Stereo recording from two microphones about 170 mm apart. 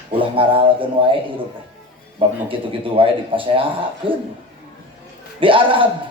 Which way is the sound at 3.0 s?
30° right (ahead or behind).